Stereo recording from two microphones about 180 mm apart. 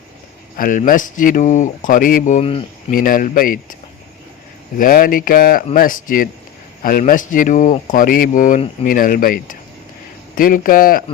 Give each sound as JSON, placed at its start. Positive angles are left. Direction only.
{"t": 0.5, "sound": "speech", "side_deg": 50}
{"t": 2.9, "sound": "speech", "side_deg": 50}
{"t": 4.8, "sound": "speech", "side_deg": 50}